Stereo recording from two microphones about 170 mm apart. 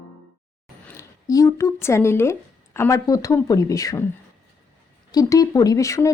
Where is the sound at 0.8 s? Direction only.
15° left (ahead or behind).